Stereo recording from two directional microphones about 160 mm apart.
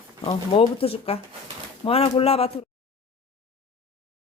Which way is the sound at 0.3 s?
35° left (ahead or behind).